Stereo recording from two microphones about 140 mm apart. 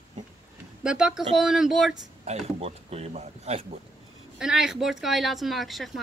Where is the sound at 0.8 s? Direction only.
5° right (ahead or behind).